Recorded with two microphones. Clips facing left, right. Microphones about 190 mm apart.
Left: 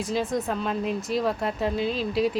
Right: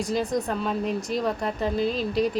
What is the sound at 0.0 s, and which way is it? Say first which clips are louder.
Speech: right 1 dB; centre (ahead or behind).